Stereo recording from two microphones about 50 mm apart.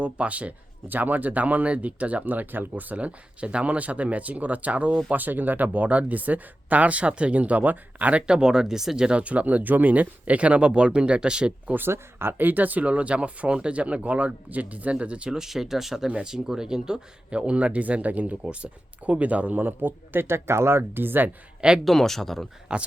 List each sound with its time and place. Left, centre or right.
0.0 s speech: right
8.3 s speech: centre
9.1 s speech: right
12.4 s speech: right
15.3 s speech: centre
16.0 s speech: centre; by 20.2 s right
20.2 s speech: right
21.8 s speech: centre
22.7 s speech: centre